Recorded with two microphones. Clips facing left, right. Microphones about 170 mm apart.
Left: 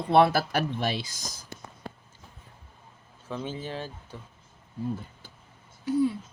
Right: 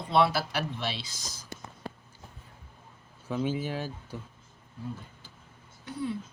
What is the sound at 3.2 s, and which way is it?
Speech, 10° right (ahead or behind).